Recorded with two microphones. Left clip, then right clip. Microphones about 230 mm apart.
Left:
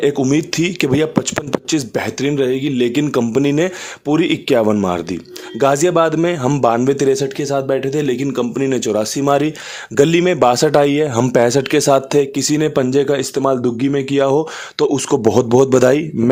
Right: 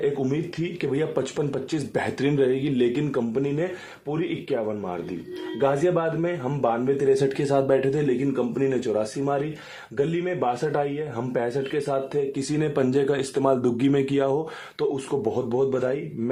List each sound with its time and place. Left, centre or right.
0.0 s speech: left
1.7 s a man's voice: left
7.2 s a man's voice: left